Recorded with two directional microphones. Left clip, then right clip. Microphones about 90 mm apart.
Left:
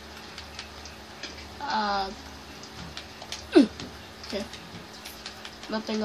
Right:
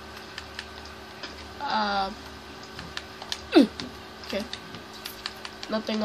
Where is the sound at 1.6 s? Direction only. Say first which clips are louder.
Right 1 dB; 85° right.